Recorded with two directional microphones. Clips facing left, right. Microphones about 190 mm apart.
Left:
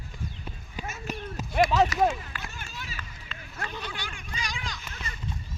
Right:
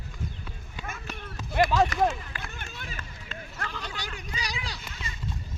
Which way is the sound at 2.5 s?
55° right (ahead or behind).